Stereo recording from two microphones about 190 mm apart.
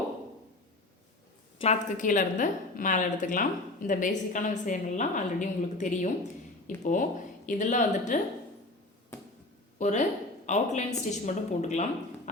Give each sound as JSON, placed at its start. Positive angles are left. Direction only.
{"t": 1.5, "sound": "a woman's voice", "side_deg": 35}
{"t": 9.7, "sound": "a woman's voice", "side_deg": 40}